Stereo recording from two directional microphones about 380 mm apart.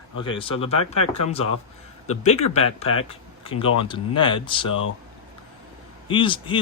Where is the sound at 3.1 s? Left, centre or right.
Centre.